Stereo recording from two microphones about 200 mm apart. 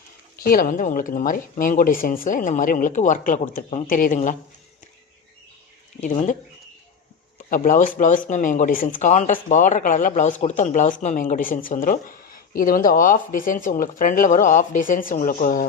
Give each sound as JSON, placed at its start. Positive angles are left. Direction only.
{"t": 0.4, "sound": "speech", "side_deg": 45}
{"t": 7.5, "sound": "speech", "side_deg": 40}